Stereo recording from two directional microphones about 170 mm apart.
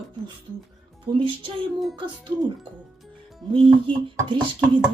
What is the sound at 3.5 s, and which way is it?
Speech, 30° right (ahead or behind).